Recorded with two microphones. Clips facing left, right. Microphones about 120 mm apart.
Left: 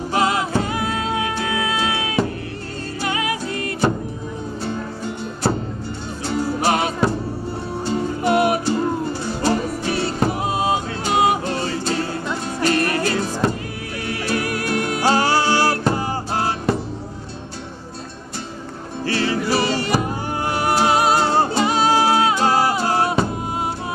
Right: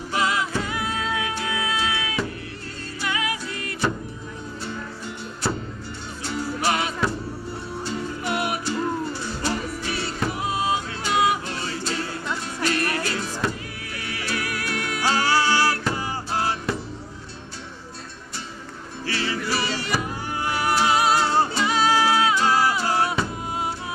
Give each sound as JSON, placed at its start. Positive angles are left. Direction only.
{"t": 0.1, "sound": "music", "side_deg": 45}
{"t": 19.0, "sound": "music", "side_deg": 45}